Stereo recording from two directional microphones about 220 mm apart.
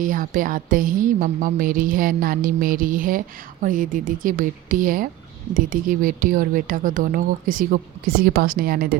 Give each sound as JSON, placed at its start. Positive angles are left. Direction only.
{"t": 0.0, "sound": "speech", "side_deg": -40}